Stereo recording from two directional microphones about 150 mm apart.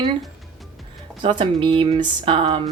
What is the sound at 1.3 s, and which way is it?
Speech, 30° right (ahead or behind).